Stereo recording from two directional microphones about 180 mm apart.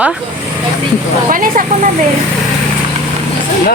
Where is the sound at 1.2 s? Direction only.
50° right (ahead or behind).